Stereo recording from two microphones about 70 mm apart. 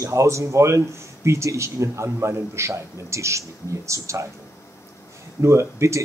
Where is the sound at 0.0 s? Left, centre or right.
Right.